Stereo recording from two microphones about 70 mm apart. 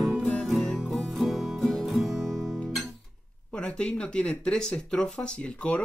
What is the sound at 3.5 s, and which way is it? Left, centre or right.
Speech, centre.